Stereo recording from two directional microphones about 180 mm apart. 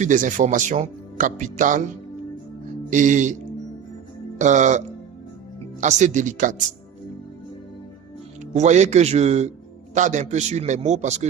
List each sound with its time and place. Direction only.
0.0 s speech: 45° right (ahead or behind)
2.9 s speech: 45° right (ahead or behind)
4.4 s speech: 40° right (ahead or behind)
5.8 s speech: 45° right (ahead or behind)
8.5 s a man's voice: 40° right (ahead or behind)